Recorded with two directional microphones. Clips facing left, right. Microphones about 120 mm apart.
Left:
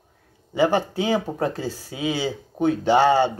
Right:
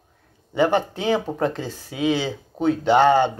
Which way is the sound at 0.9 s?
10° left (ahead or behind).